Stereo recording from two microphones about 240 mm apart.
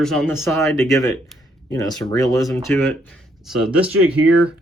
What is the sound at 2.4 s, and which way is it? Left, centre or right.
Speech, centre.